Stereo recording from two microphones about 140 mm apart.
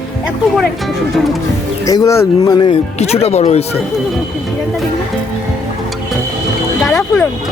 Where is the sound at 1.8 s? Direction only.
25° left (ahead or behind).